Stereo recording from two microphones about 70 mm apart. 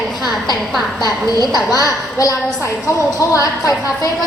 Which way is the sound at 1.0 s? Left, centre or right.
Left.